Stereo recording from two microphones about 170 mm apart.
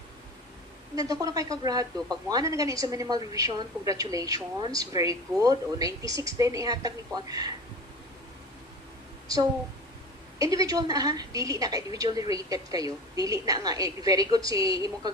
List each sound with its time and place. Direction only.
0.9 s speech: 20° right (ahead or behind)
10.3 s speech: 20° right (ahead or behind)